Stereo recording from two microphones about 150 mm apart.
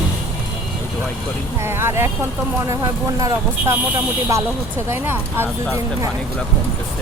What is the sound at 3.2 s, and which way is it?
Speech, 15° right (ahead or behind).